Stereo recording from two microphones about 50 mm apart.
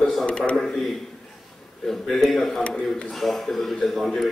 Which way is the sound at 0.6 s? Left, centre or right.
Centre.